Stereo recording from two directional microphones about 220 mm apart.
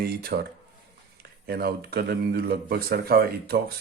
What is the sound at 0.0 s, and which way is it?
Speech, 45° right (ahead or behind).